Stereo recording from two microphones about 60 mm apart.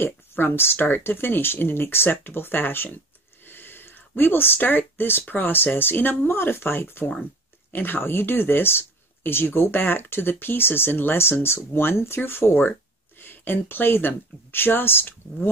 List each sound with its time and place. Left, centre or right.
0.0 s speech: left
3.4 s a sound: left
5.3 s speech: left